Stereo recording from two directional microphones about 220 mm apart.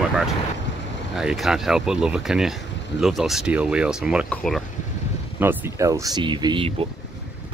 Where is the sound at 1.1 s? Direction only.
Centre (ahead or behind).